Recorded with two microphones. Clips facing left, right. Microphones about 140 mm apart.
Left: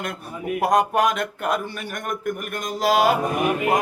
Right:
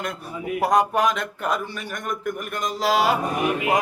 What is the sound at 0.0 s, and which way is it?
Speech, 50° left (ahead or behind).